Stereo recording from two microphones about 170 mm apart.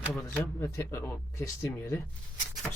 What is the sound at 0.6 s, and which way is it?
Speech, 15° left (ahead or behind).